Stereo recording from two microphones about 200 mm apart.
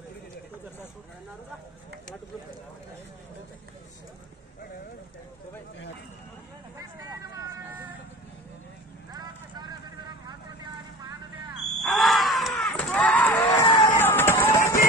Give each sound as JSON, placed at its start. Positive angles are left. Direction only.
{"t": 9.1, "sound": "vehicle", "side_deg": -20}
{"t": 11.0, "sound": "vehicle", "side_deg": -20}
{"t": 11.8, "sound": "groan", "side_deg": 0}
{"t": 12.5, "sound": "a sound", "side_deg": 5}
{"t": 13.7, "sound": "music", "side_deg": 10}